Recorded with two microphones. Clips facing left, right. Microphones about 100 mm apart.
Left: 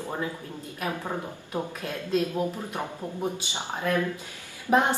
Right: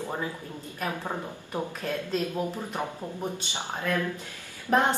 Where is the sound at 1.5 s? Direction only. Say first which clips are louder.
Right 1 dB; 10° left (ahead or behind).